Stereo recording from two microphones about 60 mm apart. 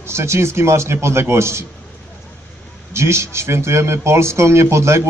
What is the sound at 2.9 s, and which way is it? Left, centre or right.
A man's voice, right.